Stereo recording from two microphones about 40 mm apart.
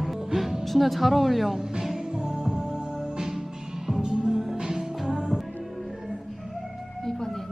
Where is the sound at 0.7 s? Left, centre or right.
Centre.